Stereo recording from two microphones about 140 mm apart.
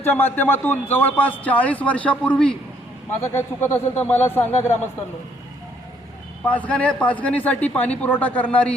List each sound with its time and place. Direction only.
0.0 s a man's voice: 15° left (ahead or behind)
6.4 s a man's voice: 10° left (ahead or behind)